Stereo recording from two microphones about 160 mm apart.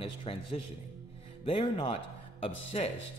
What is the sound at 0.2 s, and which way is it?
A man's voice, 35° left (ahead or behind).